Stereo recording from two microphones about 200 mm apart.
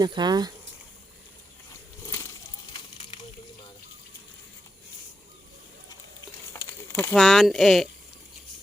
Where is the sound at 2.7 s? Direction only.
25° left (ahead or behind).